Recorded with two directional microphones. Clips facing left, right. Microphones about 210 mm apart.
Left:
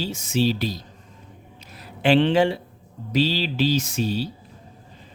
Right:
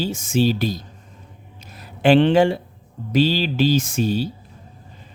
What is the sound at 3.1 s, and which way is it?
Speech, 50° right (ahead or behind).